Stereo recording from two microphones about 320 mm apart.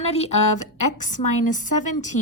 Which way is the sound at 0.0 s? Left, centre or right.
Centre.